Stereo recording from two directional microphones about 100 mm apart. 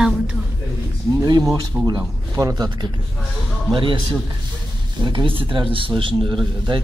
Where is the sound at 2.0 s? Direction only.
35° right (ahead or behind).